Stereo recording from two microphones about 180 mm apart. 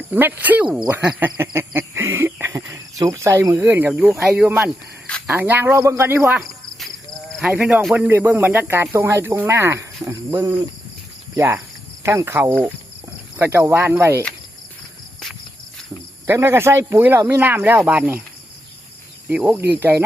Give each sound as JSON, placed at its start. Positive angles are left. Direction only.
{"t": 0.1, "sound": "speech", "side_deg": -10}
{"t": 1.2, "sound": "cricket", "side_deg": -10}
{"t": 4.2, "sound": "speech", "side_deg": -5}
{"t": 5.0, "sound": "a sound", "side_deg": 5}
{"t": 5.3, "sound": "speech", "side_deg": -10}
{"t": 7.3, "sound": "speech", "side_deg": 0}
{"t": 16.2, "sound": "speech", "side_deg": -15}
{"t": 19.3, "sound": "speech", "side_deg": -10}